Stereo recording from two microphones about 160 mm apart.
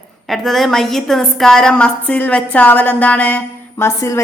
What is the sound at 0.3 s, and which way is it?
A woman's voice, centre (ahead or behind).